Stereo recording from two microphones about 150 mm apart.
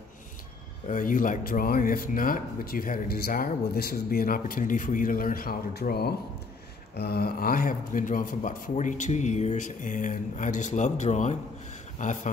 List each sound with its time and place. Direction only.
0.8 s speech: 60° left (ahead or behind)